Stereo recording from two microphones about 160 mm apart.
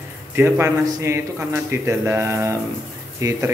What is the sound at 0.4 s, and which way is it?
Speech, 15° right (ahead or behind).